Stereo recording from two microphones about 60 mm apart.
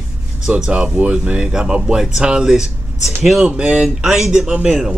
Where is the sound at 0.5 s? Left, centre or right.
Centre.